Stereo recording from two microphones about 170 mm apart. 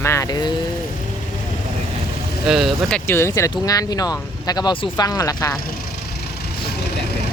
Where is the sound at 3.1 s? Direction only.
15° left (ahead or behind).